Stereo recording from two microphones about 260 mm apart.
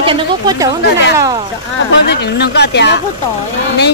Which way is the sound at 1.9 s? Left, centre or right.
Left.